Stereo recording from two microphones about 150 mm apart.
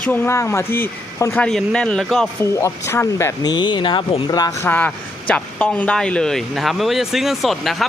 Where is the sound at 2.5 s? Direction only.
20° left (ahead or behind).